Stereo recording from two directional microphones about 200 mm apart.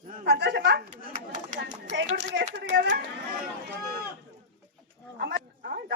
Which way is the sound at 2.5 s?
60° right (ahead or behind).